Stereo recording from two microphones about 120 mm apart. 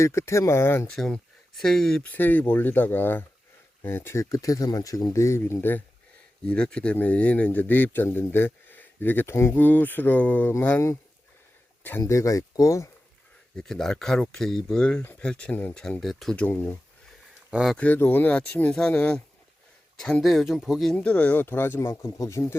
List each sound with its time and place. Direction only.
0.0 s speech: 25° left (ahead or behind)
0.9 s speech: 5° left (ahead or behind)
2.0 s speech: 15° left (ahead or behind)
6.4 s speech: 10° left (ahead or behind); by 12.9 s 25° left (ahead or behind)
13.6 s speech: 5° left (ahead or behind)
17.5 s speech: 5° right (ahead or behind)
17.7 s speech: 15° left (ahead or behind)